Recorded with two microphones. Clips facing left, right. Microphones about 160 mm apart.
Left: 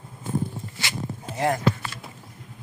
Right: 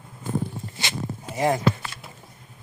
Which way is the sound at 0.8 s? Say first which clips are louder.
Right 2 dB; 20° right (ahead or behind).